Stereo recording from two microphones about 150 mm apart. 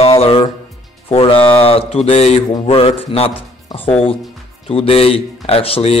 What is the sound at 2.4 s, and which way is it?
Speech, 35° left (ahead or behind).